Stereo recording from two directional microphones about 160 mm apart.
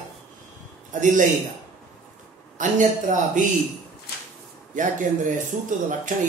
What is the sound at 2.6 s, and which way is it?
Speech, 50° right (ahead or behind).